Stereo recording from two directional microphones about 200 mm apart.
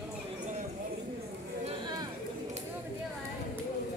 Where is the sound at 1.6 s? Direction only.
20° right (ahead or behind).